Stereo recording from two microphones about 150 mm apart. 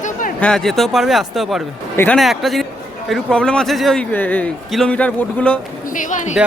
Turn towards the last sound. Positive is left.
turn(degrees=55)  # may be behind; listen again after turning